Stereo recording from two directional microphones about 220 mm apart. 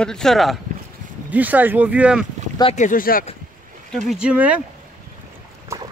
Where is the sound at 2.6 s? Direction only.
30° left (ahead or behind).